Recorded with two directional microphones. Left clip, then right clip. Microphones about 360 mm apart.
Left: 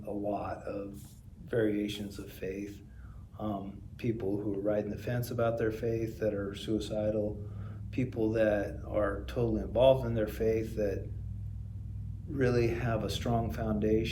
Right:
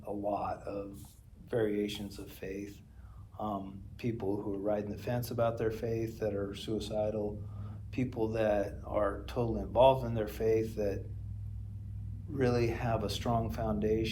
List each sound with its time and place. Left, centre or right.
0.0 s speech: centre
12.3 s speech: centre